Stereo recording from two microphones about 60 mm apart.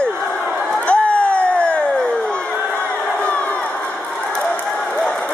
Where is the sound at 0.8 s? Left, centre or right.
Centre.